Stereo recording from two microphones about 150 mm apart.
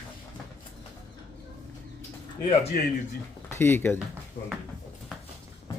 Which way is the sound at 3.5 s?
15° left (ahead or behind).